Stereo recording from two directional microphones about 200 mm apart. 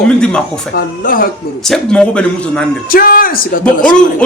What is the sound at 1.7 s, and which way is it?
Speech, 5° left (ahead or behind).